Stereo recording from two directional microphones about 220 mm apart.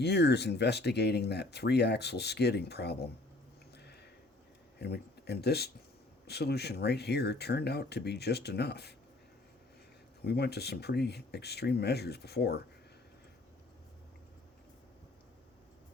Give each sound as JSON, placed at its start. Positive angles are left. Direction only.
{"t": 0.0, "sound": "speech", "side_deg": 50}
{"t": 4.8, "sound": "speech", "side_deg": 50}
{"t": 10.2, "sound": "speech", "side_deg": 50}